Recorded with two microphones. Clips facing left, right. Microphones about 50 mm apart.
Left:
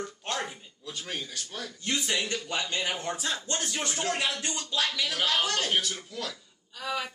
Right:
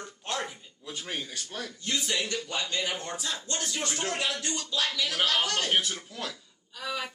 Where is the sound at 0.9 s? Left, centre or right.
Centre.